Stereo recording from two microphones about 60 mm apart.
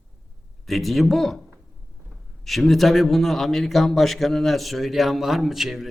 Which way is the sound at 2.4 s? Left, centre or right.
Centre.